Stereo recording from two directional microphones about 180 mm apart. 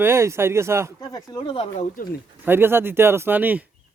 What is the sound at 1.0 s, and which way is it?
Speech, 20° left (ahead or behind).